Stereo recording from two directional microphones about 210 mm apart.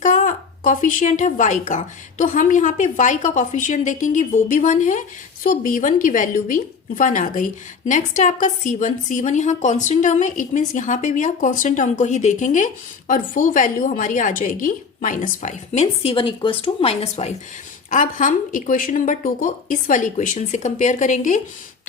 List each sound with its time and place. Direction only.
0.0 s a woman's voice: 40° left (ahead or behind)